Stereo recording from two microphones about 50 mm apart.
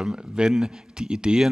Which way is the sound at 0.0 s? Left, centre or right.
Centre.